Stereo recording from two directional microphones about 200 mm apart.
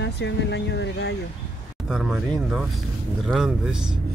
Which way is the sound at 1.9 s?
Centre (ahead or behind).